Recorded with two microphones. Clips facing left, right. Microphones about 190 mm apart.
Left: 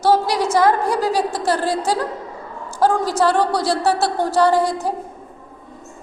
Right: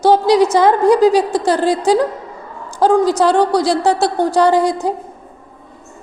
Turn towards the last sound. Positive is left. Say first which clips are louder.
# right 3 dB
turn(degrees=-15)  # may be behind; listen again after turning